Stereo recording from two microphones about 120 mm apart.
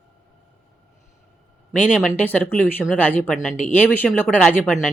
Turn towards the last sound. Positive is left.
turn(degrees=5)  # may be behind; listen again after turning